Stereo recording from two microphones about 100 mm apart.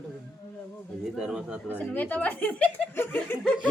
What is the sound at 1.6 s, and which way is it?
Speech, 15° left (ahead or behind).